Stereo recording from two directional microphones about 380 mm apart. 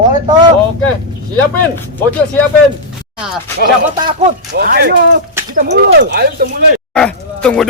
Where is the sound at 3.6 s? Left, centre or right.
Right.